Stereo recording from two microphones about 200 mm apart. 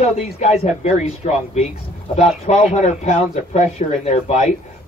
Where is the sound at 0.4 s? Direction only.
35° left (ahead or behind).